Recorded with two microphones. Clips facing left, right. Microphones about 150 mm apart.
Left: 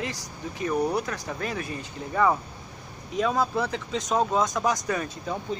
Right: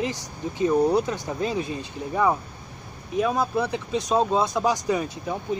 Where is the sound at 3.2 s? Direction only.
15° right (ahead or behind).